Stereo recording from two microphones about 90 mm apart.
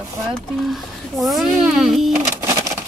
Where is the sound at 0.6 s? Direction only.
Centre (ahead or behind).